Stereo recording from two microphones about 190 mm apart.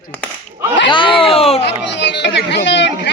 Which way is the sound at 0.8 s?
25° left (ahead or behind).